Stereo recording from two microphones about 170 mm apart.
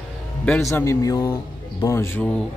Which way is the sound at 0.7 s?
15° left (ahead or behind).